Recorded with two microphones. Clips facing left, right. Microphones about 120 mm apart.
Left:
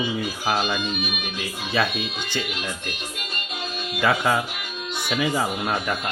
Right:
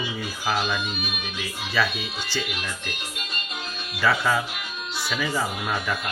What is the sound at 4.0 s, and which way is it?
Speech, 15° left (ahead or behind).